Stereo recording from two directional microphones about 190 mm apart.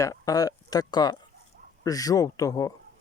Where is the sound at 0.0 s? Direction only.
20° left (ahead or behind).